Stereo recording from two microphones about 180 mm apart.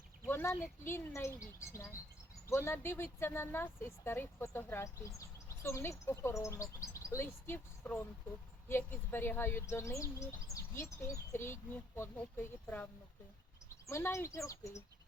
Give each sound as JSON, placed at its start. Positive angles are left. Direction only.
{"t": 0.3, "sound": "speech", "side_deg": 10}
{"t": 2.5, "sound": "speech", "side_deg": 15}